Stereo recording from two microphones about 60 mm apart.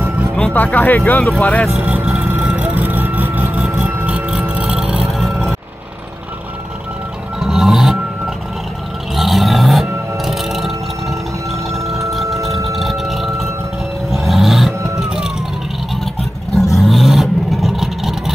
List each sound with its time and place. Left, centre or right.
0.0 s music: right
0.4 s speech: left
1.8 s vehicle: right
3.8 s a sound: right
5.3 s vehicle: centre
7.3 s vehicle: centre
9.1 s a sound: centre
14.1 s vehicle: centre
16.7 s vehicle: centre